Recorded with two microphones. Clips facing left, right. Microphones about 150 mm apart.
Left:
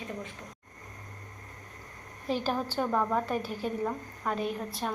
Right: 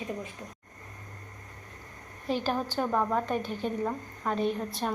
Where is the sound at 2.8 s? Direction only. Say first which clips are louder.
Even; 5° right (ahead or behind).